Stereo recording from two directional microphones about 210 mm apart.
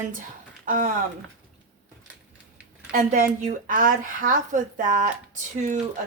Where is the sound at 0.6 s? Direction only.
40° right (ahead or behind).